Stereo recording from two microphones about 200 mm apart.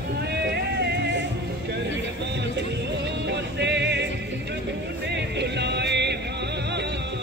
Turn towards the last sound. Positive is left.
turn(degrees=-60)  # may be behind; listen again after turning